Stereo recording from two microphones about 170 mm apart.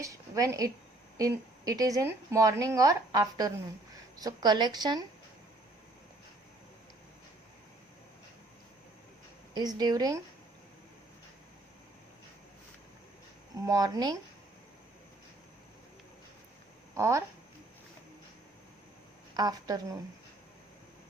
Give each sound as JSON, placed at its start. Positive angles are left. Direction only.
{"t": 0.0, "sound": "a woman's voice", "side_deg": -20}
{"t": 9.6, "sound": "a woman's voice", "side_deg": -25}
{"t": 13.7, "sound": "a woman's voice", "side_deg": -20}
{"t": 16.9, "sound": "speech", "side_deg": -15}
{"t": 19.4, "sound": "a woman's voice", "side_deg": -25}